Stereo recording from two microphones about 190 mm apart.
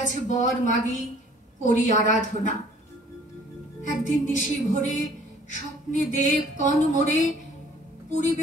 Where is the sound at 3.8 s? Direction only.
40° left (ahead or behind).